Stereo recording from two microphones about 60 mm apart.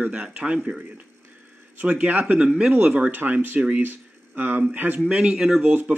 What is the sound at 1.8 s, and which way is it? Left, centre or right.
Speech, right.